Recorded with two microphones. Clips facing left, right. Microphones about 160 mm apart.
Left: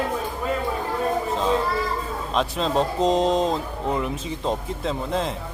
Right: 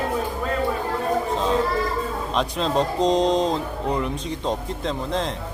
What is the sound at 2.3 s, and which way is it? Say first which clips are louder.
Speech: even; centre (ahead or behind).